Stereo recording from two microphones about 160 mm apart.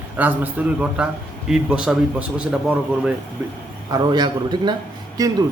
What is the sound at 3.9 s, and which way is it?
A man's voice, 25° right (ahead or behind).